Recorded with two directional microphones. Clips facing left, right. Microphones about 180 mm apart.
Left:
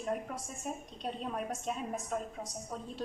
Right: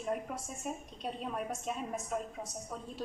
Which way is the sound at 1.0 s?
Centre (ahead or behind).